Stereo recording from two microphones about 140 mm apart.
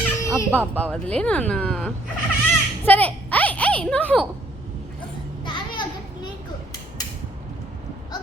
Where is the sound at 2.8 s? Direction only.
10° left (ahead or behind).